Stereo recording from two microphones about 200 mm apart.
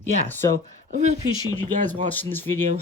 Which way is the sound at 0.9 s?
35° right (ahead or behind).